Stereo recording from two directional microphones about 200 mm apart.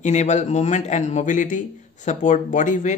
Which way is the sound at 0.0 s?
35° left (ahead or behind).